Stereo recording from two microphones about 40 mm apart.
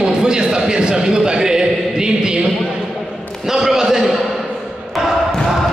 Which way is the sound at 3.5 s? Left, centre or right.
Centre.